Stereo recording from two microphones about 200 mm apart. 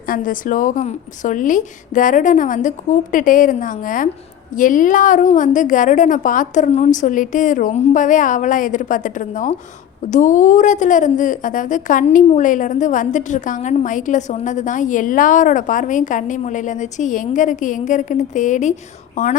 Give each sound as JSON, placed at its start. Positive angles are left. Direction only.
{"t": 0.1, "sound": "a woman's voice", "side_deg": 40}